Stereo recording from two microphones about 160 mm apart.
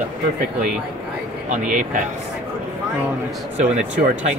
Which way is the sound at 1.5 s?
55° right (ahead or behind).